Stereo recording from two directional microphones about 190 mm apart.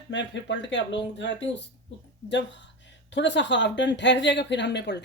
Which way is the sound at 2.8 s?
70° left (ahead or behind).